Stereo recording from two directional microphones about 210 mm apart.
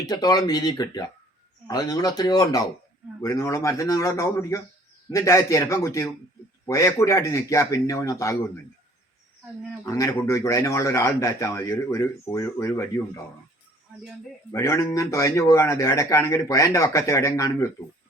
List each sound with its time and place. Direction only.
0.0 s a man's voice: 20° left (ahead or behind)
9.8 s a man's voice: 15° left (ahead or behind)
14.5 s a man's voice: 15° left (ahead or behind)